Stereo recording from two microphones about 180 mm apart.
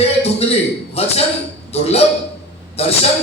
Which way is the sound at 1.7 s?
35° left (ahead or behind).